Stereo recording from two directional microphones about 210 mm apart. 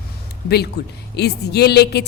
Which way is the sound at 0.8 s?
50° left (ahead or behind).